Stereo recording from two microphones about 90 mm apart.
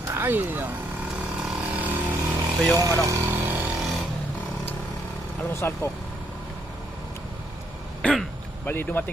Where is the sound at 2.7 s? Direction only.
40° right (ahead or behind).